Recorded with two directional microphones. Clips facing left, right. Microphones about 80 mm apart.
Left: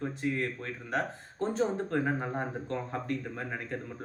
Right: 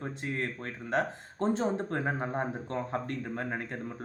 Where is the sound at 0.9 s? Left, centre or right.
Right.